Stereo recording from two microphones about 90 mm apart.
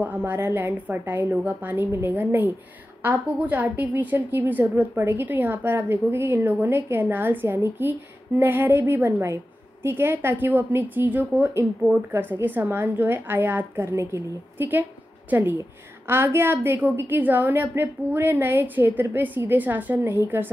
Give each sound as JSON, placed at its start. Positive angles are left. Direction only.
{"t": 0.0, "sound": "a woman's voice", "side_deg": -20}